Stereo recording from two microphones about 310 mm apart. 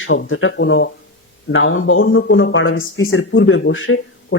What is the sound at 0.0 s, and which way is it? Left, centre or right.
Speech, left.